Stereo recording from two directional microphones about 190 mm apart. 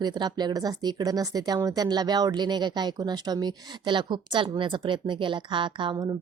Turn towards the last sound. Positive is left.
turn(degrees=-20)  # may be behind; listen again after turning